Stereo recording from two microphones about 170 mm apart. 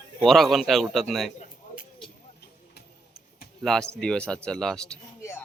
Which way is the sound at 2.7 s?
65° left (ahead or behind).